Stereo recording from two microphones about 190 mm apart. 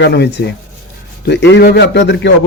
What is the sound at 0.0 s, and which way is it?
Speech, 65° left (ahead or behind).